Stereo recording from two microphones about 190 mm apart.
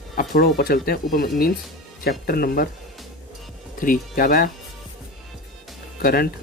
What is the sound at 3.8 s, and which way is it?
Speech, 45° left (ahead or behind).